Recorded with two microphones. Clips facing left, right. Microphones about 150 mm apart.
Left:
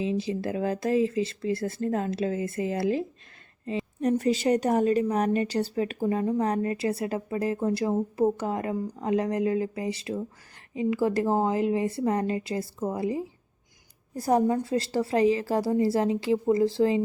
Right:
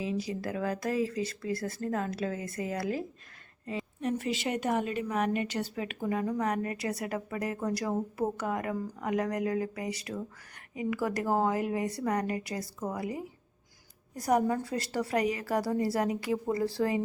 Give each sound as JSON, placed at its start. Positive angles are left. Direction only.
{"t": 0.0, "sound": "speech", "side_deg": 25}
{"t": 4.0, "sound": "a woman's voice", "side_deg": 40}